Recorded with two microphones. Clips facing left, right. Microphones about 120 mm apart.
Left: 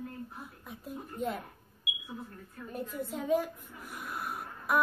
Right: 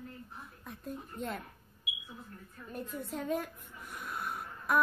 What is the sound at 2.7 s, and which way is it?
Speech, centre (ahead or behind).